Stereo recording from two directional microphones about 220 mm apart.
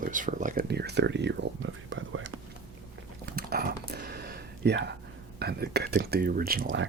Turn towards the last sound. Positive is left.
turn(degrees=-40)  # may be behind; listen again after turning